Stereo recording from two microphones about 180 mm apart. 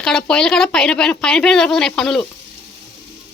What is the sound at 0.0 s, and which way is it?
Speech, 5° left (ahead or behind).